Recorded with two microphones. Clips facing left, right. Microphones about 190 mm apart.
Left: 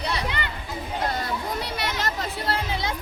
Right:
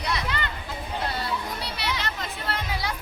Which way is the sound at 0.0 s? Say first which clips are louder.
Left 1 dB; 30° left (ahead or behind).